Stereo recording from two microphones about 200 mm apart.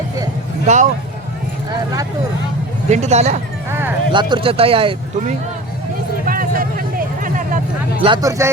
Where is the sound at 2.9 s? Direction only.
35° right (ahead or behind).